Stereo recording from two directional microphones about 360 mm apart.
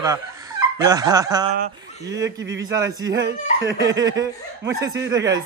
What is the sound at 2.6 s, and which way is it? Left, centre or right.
Speech, centre.